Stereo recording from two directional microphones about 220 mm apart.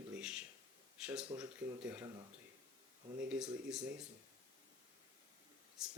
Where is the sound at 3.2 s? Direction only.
5° right (ahead or behind).